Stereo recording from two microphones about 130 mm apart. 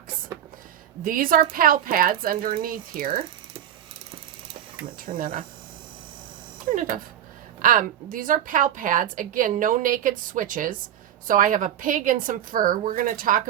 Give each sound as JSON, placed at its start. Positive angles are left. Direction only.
{"t": 1.0, "sound": "a woman's voice", "side_deg": -90}
{"t": 4.9, "sound": "a woman's voice", "side_deg": -90}
{"t": 6.7, "sound": "a woman's voice", "side_deg": -90}